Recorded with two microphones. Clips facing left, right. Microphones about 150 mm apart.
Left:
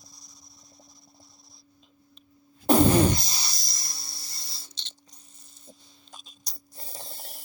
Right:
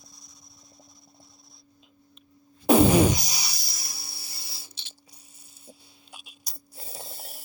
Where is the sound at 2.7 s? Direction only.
10° right (ahead or behind).